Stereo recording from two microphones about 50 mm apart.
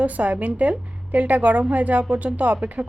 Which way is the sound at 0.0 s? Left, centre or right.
Right.